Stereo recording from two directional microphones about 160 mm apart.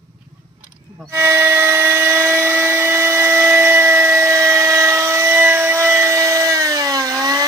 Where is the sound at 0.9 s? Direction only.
10° right (ahead or behind).